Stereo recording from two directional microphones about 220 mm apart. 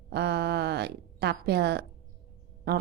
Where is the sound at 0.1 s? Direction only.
50° right (ahead or behind).